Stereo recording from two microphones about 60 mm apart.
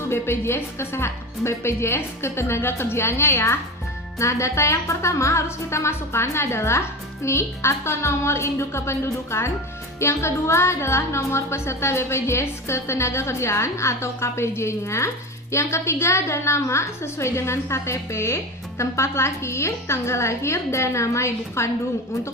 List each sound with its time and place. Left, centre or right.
0.1 s a woman's voice: left